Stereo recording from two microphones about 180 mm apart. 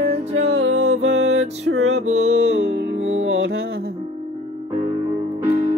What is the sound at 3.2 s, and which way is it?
Music, 80° right.